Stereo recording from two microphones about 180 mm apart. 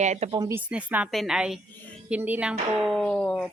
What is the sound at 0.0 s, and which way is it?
Speech, 40° right (ahead or behind).